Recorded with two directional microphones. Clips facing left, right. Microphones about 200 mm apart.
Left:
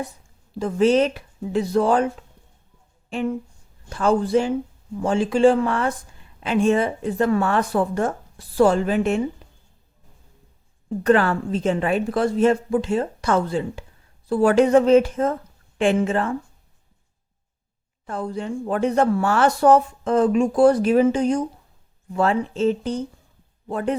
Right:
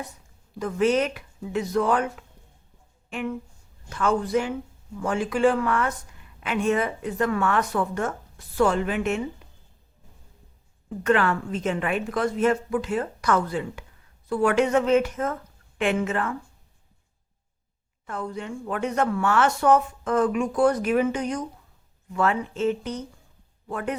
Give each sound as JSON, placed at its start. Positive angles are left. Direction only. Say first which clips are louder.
{"t": 0.6, "sound": "a woman's voice", "louder": "left 5 dB", "side_deg": 30}
{"t": 10.8, "sound": "a woman's voice", "louder": "left 4 dB", "side_deg": 35}
{"t": 18.0, "sound": "a woman's voice", "louder": "left 4 dB", "side_deg": 30}